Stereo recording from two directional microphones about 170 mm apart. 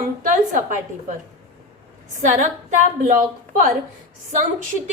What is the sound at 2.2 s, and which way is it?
Speech, 45° right (ahead or behind).